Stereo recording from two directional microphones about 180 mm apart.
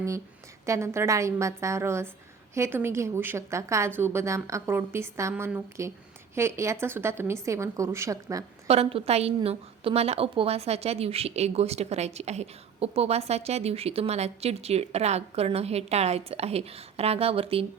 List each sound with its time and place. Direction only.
0.6 s a woman's voice: 15° right (ahead or behind)
8.6 s a woman's voice: 35° right (ahead or behind)